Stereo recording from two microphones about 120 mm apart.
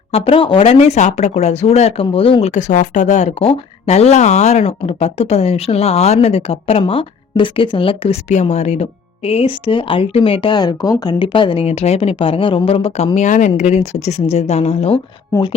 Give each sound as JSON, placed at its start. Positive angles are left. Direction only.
{"t": 0.1, "sound": "speech", "side_deg": 50}
{"t": 2.5, "sound": "speech", "side_deg": 90}
{"t": 11.6, "sound": "speech", "side_deg": 60}
{"t": 13.1, "sound": "speech", "side_deg": 90}